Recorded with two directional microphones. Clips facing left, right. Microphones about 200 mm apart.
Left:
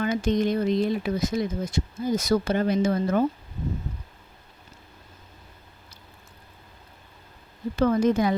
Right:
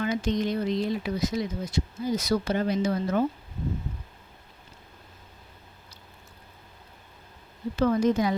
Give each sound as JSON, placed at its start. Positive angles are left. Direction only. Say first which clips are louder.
{"t": 0.0, "sound": "speech", "louder": "left 3 dB", "side_deg": 50}
{"t": 7.8, "sound": "speech", "louder": "left 2 dB", "side_deg": 55}